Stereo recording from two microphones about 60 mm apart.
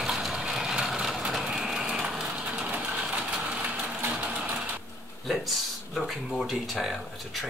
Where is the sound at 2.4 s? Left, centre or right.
Centre.